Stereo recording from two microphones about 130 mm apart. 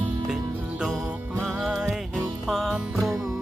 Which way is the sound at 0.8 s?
5° right (ahead or behind).